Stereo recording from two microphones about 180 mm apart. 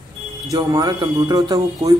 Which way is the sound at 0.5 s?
20° right (ahead or behind).